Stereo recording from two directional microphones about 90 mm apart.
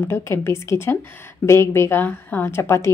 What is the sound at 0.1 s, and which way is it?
A woman's voice, 30° left (ahead or behind).